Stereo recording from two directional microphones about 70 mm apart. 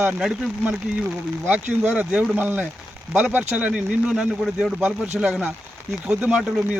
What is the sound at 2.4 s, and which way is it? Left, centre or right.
Speech, right.